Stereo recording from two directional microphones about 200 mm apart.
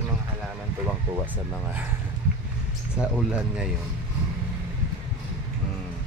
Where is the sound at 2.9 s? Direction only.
5° right (ahead or behind).